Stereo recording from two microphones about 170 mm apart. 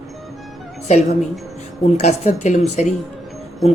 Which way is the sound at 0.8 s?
40° left (ahead or behind).